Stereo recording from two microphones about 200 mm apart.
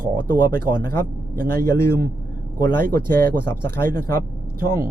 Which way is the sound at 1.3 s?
50° right (ahead or behind).